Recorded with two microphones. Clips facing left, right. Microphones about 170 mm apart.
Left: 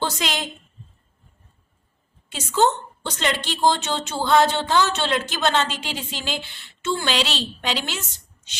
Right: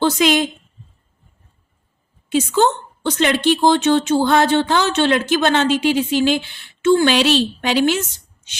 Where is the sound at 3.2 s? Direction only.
65° right (ahead or behind).